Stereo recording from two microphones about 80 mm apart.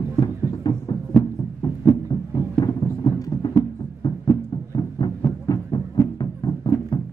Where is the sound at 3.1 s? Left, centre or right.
Left.